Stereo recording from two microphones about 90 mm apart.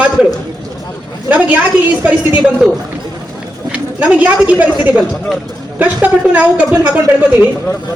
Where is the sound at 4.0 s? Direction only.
15° right (ahead or behind).